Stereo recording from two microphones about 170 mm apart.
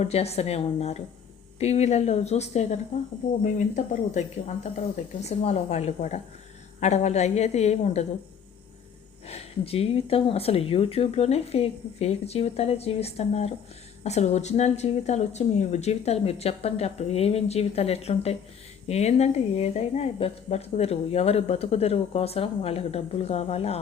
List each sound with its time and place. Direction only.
0.0 s speech: 40° left (ahead or behind)
9.2 s speech: 35° left (ahead or behind)